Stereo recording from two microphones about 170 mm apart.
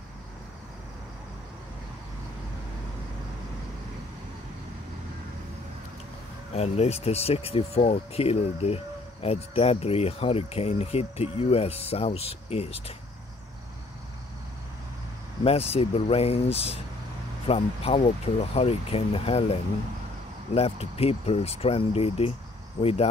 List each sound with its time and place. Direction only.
6.5 s speech: 40° left (ahead or behind)
15.4 s speech: 35° left (ahead or behind)